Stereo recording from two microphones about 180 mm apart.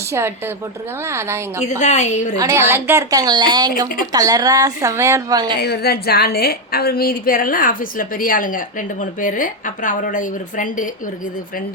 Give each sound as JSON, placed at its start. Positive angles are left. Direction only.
{"t": 0.1, "sound": "a woman's voice", "side_deg": -15}
{"t": 1.8, "sound": "a woman's voice", "side_deg": 40}
{"t": 2.4, "sound": "a woman's voice", "side_deg": -15}
{"t": 5.5, "sound": "a woman's voice", "side_deg": 60}